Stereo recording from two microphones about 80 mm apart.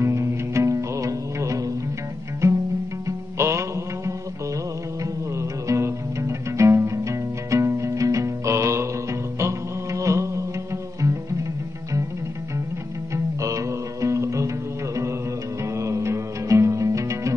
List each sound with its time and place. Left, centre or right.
0.0 s music: right
13.1 s music: right
15.6 s music: right